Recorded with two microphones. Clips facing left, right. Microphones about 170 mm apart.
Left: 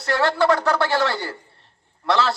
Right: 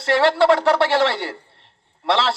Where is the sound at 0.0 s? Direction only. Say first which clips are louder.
Right 4 dB; 25° right (ahead or behind).